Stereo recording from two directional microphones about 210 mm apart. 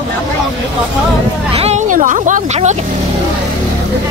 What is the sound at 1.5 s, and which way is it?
Speech, 30° right (ahead or behind).